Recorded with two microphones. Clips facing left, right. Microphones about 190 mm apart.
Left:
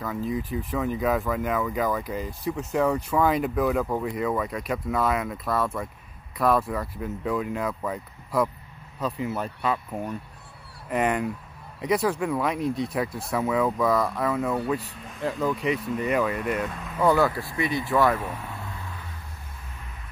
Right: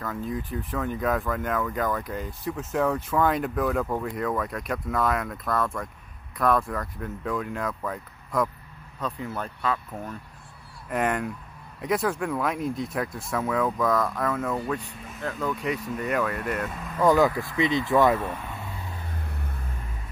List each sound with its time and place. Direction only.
0.0 s speech: centre (ahead or behind)
17.0 s speech: 15° right (ahead or behind)
18.2 s speech: 5° left (ahead or behind)
19.1 s vehicle: 60° right (ahead or behind)